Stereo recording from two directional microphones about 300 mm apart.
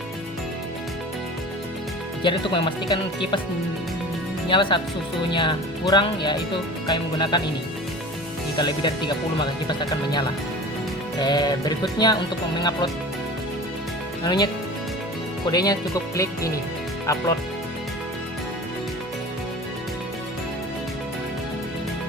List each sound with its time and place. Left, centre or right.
2.2 s speech: centre
4.4 s speech: centre
8.5 s speech: centre
14.3 s speech: centre